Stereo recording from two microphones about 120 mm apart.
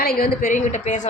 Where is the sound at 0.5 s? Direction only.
90° left.